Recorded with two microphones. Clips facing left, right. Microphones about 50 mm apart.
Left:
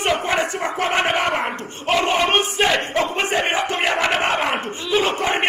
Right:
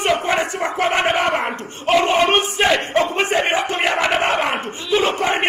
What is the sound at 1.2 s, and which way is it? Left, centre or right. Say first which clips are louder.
Speech: right 2 dB; right.